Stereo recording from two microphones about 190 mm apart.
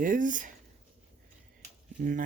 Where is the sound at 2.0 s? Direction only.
45° right (ahead or behind).